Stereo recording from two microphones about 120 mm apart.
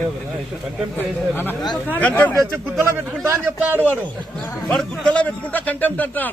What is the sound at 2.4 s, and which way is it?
A man's voice, 20° right (ahead or behind).